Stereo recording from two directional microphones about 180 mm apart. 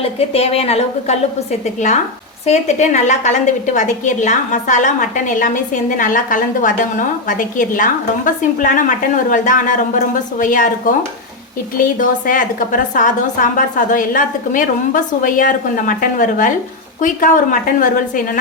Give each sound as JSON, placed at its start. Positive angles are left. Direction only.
{"t": 0.0, "sound": "a woman's voice", "side_deg": 35}
{"t": 11.9, "sound": "a woman's voice", "side_deg": 45}